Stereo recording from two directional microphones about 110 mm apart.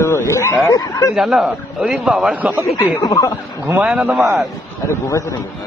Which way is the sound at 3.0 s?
30° left (ahead or behind).